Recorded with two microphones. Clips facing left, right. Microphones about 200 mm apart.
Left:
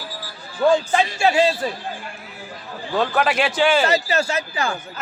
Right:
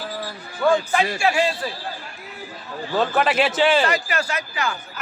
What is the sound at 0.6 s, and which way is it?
Speech, 20° left (ahead or behind).